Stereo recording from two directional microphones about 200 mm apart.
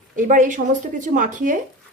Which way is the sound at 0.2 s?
40° right (ahead or behind).